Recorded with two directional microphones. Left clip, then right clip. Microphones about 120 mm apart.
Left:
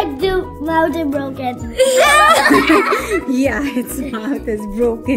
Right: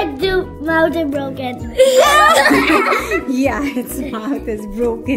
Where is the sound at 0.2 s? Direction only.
5° left (ahead or behind).